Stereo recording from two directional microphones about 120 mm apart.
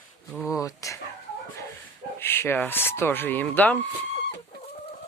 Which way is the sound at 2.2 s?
20° left (ahead or behind).